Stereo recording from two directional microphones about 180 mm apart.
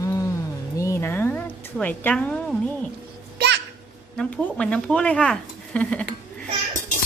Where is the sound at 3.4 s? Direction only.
70° right (ahead or behind).